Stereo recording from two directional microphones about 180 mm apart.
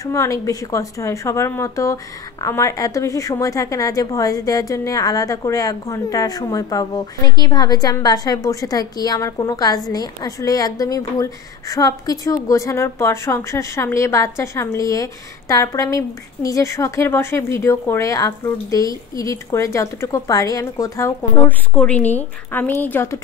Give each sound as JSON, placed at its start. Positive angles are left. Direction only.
{"t": 0.0, "sound": "a woman's voice", "side_deg": 15}